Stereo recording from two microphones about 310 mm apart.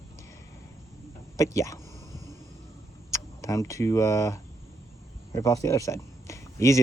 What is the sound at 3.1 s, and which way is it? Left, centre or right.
Speech, centre.